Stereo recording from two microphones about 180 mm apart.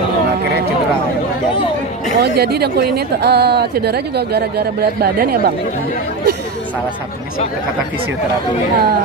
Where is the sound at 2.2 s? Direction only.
60° right (ahead or behind).